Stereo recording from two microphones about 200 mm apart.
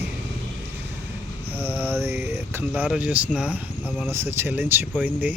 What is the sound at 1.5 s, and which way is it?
Speech, 10° right (ahead or behind).